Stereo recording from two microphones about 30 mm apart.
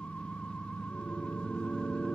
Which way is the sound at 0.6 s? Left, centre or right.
Left.